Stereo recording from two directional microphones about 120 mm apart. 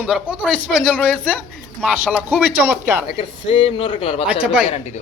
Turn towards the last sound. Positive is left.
turn(degrees=-10)  # may be behind; listen again after turning